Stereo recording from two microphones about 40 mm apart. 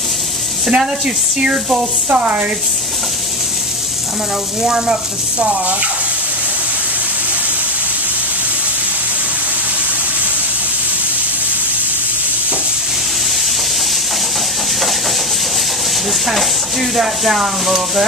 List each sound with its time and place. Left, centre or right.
0.7 s speech: centre
2.0 s speech: right
4.6 s frying: centre
16.9 s speech: centre